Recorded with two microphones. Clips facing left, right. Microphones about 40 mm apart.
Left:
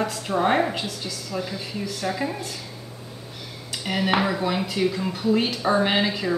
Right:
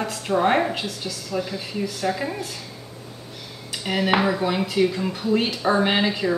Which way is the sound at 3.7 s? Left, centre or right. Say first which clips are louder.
Right 2 dB; centre.